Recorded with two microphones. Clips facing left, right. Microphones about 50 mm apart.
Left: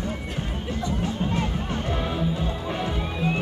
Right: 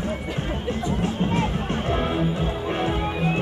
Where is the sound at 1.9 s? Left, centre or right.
Right.